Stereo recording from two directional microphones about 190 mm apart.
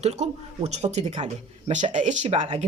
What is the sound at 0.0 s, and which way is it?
Speech, 35° right (ahead or behind).